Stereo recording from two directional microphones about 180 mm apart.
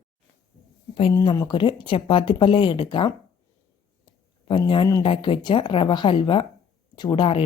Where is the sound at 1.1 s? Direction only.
20° left (ahead or behind).